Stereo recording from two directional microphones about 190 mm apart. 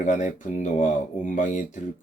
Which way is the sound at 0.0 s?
40° left (ahead or behind).